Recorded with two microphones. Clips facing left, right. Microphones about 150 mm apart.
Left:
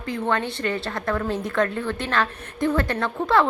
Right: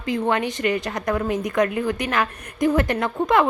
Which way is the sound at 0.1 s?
15° right (ahead or behind).